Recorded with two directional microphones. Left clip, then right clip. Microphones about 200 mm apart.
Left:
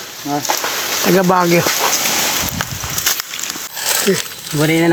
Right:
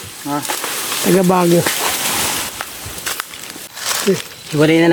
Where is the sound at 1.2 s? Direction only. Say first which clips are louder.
Left 2 dB; 35° right (ahead or behind).